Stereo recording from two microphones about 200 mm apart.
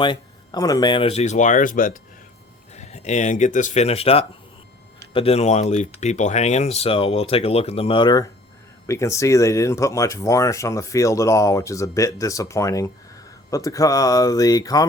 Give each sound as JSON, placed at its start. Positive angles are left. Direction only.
{"t": 0.0, "sound": "speech", "side_deg": 20}